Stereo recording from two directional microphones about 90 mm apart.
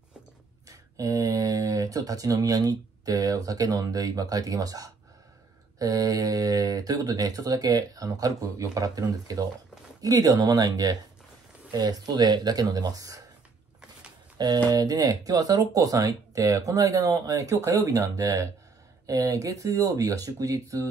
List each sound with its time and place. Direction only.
0.7 s speech: 40° right (ahead or behind)
14.7 s speech: 45° right (ahead or behind)